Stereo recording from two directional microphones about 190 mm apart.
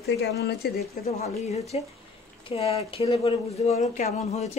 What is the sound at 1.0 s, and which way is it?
Speech, 35° left (ahead or behind).